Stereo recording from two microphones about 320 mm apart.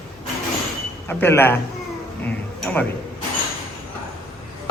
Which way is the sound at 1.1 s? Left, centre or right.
Centre.